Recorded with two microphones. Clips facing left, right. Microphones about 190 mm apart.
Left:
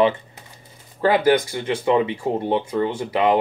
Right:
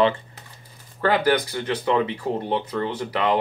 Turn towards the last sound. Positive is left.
turn(degrees=20)  # may be behind; listen again after turning